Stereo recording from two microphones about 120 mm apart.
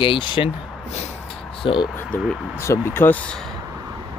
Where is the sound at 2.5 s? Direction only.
20° left (ahead or behind); by 3.5 s 5° left (ahead or behind).